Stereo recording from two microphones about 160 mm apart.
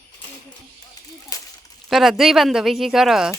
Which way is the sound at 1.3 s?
20° left (ahead or behind).